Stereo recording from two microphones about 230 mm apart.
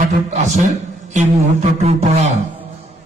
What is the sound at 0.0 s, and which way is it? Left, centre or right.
A man's voice, right.